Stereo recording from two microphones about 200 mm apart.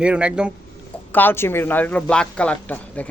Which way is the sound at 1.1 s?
10° left (ahead or behind).